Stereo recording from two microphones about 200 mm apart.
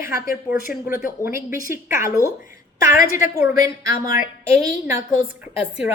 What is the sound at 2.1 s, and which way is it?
Speech, 15° left (ahead or behind).